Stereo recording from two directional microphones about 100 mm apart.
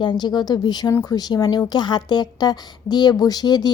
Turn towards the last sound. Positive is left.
turn(degrees=40)  # may be behind; listen again after turning